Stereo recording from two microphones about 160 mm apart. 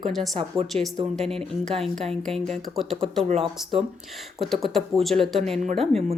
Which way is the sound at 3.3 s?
35° right (ahead or behind).